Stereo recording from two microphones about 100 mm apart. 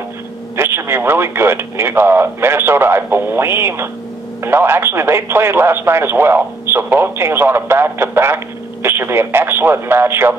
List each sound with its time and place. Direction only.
0.6 s speech: 25° right (ahead or behind)